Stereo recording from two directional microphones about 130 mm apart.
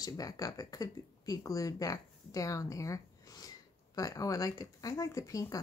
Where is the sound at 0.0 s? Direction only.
30° left (ahead or behind).